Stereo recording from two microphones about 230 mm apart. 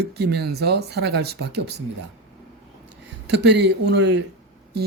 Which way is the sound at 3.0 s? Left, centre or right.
Right.